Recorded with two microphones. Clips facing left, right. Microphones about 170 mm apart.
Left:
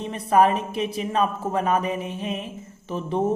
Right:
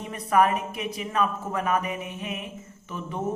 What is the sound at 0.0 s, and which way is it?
A woman's voice, 30° left (ahead or behind).